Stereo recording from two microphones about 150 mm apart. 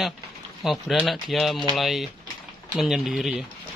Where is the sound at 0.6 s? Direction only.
Centre (ahead or behind).